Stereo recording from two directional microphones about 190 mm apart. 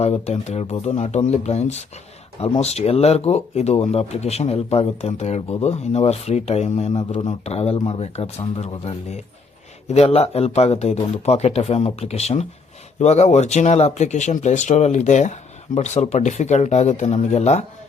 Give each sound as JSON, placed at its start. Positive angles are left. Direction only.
{"t": 0.0, "sound": "speech", "side_deg": 35}